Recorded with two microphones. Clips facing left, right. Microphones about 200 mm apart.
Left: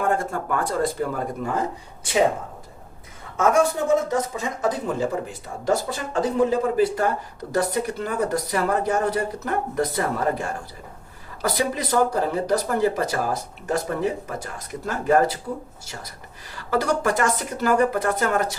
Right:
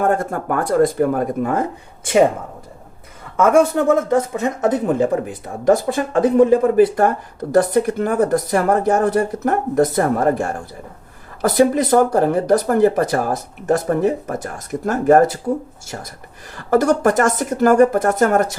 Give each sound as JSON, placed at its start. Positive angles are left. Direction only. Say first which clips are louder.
{"t": 0.0, "sound": "speech", "louder": "right 5 dB", "side_deg": -55}
{"t": 3.5, "sound": "speech", "louder": "right 6 dB", "side_deg": -55}
{"t": 16.6, "sound": "speech", "louder": "right 7 dB", "side_deg": -50}